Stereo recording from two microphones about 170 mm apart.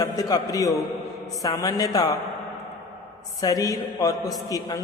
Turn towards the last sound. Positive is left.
turn(degrees=20)  # may be behind; listen again after turning